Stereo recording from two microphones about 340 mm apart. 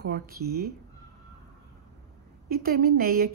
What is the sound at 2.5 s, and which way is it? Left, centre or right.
Speech, right.